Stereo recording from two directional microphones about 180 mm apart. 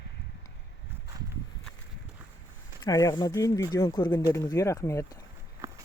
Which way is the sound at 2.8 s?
20° left (ahead or behind).